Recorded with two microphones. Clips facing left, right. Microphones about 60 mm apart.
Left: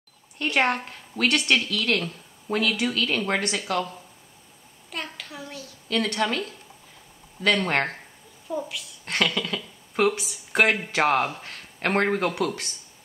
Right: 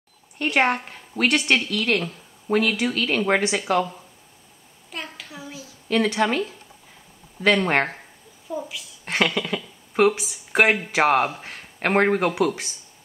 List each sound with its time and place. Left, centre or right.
0.4 s speech: centre
4.9 s a sound: centre
5.9 s speech: centre
9.0 s speech: centre